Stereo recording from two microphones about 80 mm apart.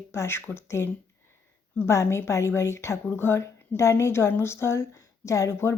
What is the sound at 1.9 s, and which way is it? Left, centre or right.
A woman's voice, left.